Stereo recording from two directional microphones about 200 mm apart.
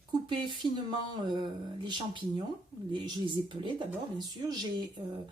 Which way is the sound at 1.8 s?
25° right (ahead or behind).